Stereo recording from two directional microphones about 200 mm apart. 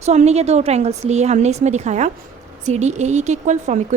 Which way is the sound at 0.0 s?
35° right (ahead or behind).